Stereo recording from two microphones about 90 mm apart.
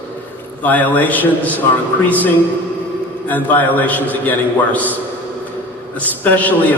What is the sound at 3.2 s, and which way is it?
A man's voice, 20° left (ahead or behind).